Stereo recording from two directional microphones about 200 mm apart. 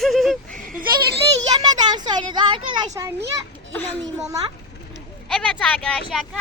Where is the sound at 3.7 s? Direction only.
10° left (ahead or behind).